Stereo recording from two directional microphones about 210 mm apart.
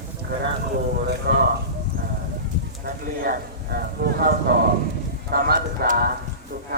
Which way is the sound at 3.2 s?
45° right (ahead or behind).